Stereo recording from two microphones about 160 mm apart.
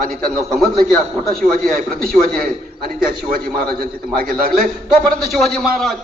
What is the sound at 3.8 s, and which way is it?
A man's voice, 65° right (ahead or behind).